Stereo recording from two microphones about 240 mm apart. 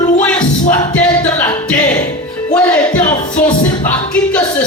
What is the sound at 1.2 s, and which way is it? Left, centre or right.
Speech, centre.